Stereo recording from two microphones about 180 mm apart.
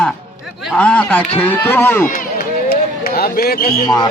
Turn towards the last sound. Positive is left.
turn(degrees=20)  # may be behind; listen again after turning